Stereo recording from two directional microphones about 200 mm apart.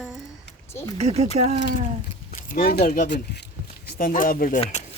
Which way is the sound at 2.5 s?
50° left (ahead or behind).